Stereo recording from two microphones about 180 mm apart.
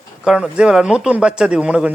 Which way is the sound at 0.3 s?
5° right (ahead or behind).